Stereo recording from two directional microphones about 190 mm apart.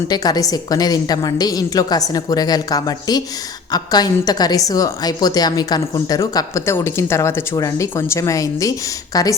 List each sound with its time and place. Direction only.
0.1 s a woman's voice: 20° left (ahead or behind)